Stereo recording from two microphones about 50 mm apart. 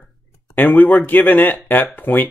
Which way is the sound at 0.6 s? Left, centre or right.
Left.